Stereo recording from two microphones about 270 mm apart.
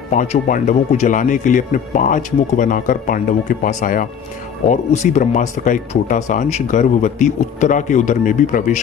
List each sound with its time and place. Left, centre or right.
0.1 s speech: left